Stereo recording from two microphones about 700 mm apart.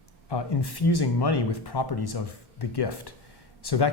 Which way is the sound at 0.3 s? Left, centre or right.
Left.